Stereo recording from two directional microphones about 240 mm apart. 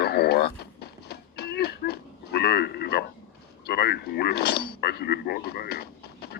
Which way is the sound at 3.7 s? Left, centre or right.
Left.